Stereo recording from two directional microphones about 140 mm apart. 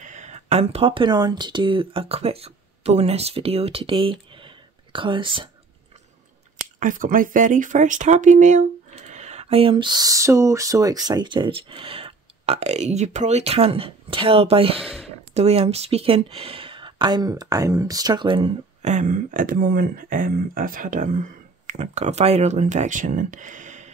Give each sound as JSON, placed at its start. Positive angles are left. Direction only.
{"t": 0.0, "sound": "speech", "side_deg": -60}
{"t": 6.8, "sound": "speech", "side_deg": -75}
{"t": 14.8, "sound": "speech", "side_deg": 0}
{"t": 15.0, "sound": "speech", "side_deg": -50}
{"t": 18.8, "sound": "speech", "side_deg": -60}